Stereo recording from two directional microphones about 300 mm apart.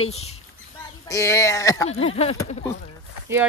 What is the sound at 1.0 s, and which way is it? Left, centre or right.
Speech, centre.